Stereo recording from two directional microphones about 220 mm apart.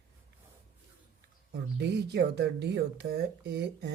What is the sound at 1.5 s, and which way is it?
Speech, 50° right (ahead or behind).